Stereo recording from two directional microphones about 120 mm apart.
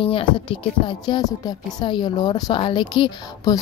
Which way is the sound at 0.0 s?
50° left (ahead or behind).